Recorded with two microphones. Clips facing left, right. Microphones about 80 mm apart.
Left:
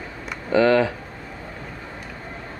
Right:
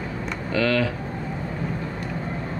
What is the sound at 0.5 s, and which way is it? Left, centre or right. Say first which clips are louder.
Speech: left 6 dB; left.